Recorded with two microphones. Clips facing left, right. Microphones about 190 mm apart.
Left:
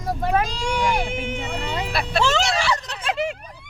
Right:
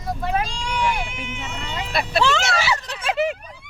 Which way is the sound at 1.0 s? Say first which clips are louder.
Left 6 dB; 55° left (ahead or behind).